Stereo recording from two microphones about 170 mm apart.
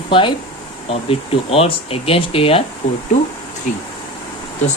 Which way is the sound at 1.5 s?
35° left (ahead or behind).